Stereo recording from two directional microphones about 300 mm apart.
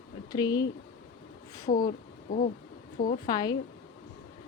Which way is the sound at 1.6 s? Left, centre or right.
Left.